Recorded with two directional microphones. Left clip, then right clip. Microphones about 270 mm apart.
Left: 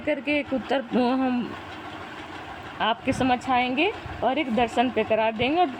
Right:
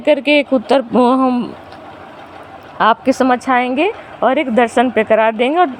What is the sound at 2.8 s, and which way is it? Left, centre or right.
Speech, right.